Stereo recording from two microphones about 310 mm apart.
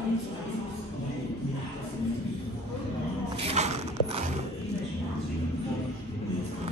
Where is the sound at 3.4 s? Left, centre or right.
Centre.